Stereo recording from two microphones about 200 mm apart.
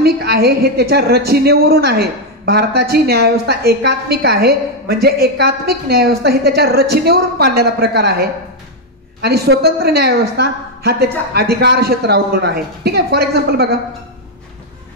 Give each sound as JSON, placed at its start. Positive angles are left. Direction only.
{"t": 0.0, "sound": "a woman's voice", "side_deg": -55}